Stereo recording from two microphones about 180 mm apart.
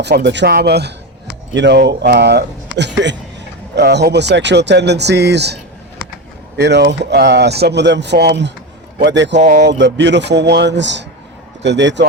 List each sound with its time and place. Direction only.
0.0 s speech: 70° right (ahead or behind)
2.7 s a man's voice: 75° right (ahead or behind)
3.8 s speech: 70° right (ahead or behind)
6.6 s a man's voice: 70° right (ahead or behind)
9.4 s speech: 40° right (ahead or behind)
9.6 s speech: 80° right